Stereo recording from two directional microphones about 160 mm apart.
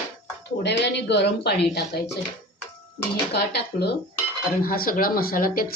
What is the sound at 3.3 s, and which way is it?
Speech, 90° left.